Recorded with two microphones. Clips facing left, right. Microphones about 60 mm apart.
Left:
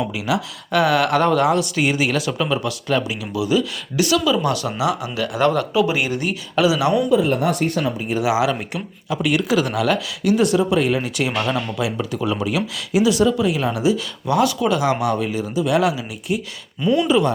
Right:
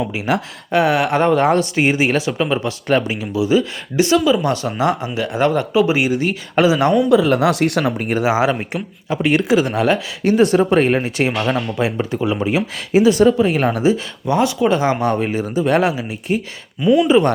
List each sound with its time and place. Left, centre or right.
0.3 s speech: right
0.7 s speech: right
2.8 s speech: right
4.8 s speech: right
5.0 s speech: right
6.6 s speech: right
7.1 s speech: right
8.1 s speech: right
16.8 s speech: centre